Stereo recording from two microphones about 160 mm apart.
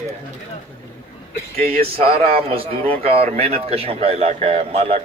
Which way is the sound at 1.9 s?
35° right (ahead or behind).